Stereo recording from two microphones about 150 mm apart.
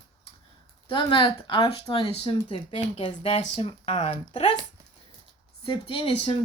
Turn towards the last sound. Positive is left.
turn(degrees=35)  # may be behind; listen again after turning